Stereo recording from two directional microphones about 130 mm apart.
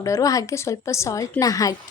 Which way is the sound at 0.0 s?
25° left (ahead or behind).